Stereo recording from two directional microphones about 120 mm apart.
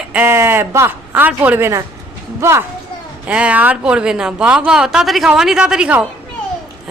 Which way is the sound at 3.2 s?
10° right (ahead or behind).